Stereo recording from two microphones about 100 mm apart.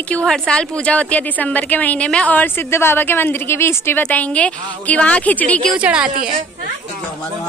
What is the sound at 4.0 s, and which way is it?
A woman's voice, 15° left (ahead or behind).